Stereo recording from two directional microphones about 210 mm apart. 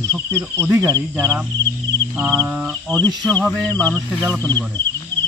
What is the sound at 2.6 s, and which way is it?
Speech, centre (ahead or behind).